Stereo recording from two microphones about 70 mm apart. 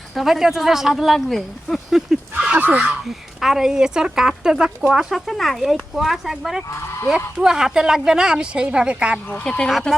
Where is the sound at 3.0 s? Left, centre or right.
Centre.